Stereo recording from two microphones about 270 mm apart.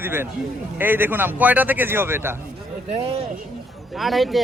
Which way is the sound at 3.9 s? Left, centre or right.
Centre.